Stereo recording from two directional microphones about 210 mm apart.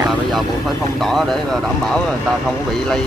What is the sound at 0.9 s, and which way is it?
Speech, centre (ahead or behind).